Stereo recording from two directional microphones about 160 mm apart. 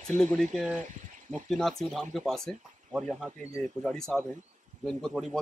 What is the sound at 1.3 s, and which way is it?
A man's voice, centre (ahead or behind).